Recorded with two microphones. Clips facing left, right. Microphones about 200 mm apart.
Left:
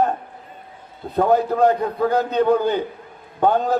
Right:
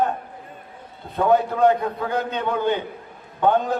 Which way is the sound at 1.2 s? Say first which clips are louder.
Left 1 dB; 35° left (ahead or behind).